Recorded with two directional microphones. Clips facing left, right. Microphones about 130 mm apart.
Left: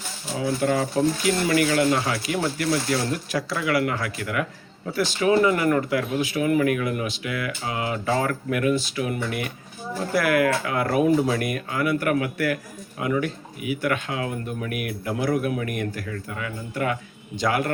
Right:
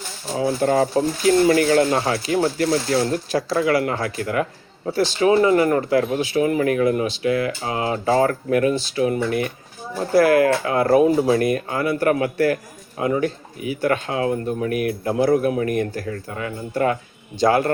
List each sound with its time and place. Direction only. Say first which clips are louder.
0.3 s speech: right 5 dB; 35° right (ahead or behind)